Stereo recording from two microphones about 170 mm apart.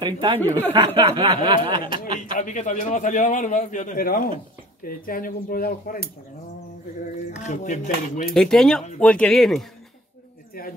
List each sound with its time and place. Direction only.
0.0 s speech: 30° right (ahead or behind)
2.3 s a man's voice: 45° left (ahead or behind)
7.3 s a man's voice: 45° left (ahead or behind)
8.4 s speech: 5° left (ahead or behind)